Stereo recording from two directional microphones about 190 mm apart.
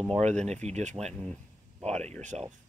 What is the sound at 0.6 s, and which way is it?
Speech, 35° right (ahead or behind).